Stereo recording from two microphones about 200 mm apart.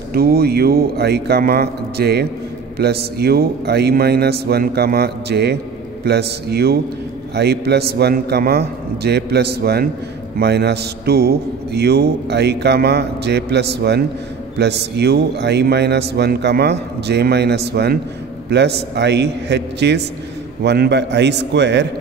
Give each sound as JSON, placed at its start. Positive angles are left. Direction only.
{"t": 0.1, "sound": "a man's voice", "side_deg": -50}